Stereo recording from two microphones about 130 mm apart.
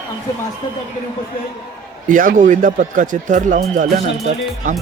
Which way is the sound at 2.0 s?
90° right.